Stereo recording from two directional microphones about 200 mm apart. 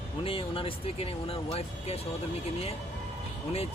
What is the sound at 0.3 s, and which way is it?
Speech, 25° left (ahead or behind).